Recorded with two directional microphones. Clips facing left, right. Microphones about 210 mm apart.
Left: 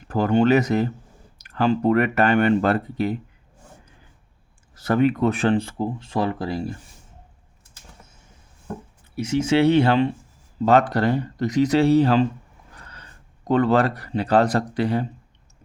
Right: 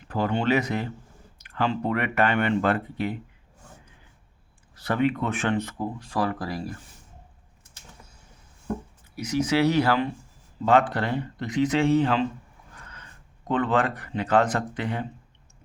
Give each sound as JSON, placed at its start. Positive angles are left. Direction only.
{"t": 0.1, "sound": "speech", "side_deg": 45}
{"t": 4.7, "sound": "speech", "side_deg": 45}
{"t": 9.1, "sound": "speech", "side_deg": 25}
{"t": 10.7, "sound": "speech", "side_deg": 40}